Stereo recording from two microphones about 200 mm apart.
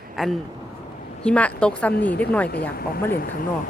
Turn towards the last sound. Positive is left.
turn(degrees=45)  # may be behind; listen again after turning